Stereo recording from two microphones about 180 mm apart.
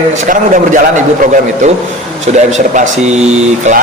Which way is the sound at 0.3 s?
45° right (ahead or behind).